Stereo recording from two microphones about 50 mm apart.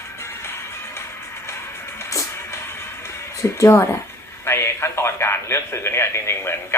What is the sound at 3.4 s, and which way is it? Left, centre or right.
A man's voice, left.